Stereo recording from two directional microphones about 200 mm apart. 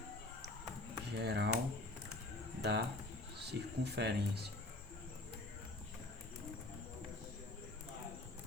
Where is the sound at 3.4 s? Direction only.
55° right (ahead or behind).